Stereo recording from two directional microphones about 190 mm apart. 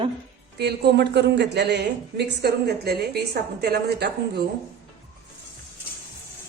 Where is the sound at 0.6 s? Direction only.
60° right (ahead or behind).